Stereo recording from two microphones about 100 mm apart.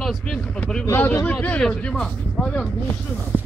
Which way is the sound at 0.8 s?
20° left (ahead or behind).